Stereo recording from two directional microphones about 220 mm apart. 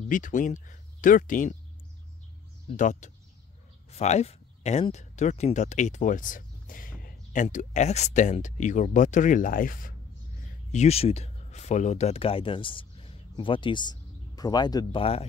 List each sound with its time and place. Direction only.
0.0 s speech: 35° left (ahead or behind)
2.7 s speech: 35° left (ahead or behind)